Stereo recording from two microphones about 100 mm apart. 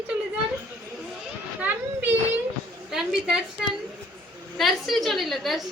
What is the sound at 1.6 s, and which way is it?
Children playing, 20° right (ahead or behind).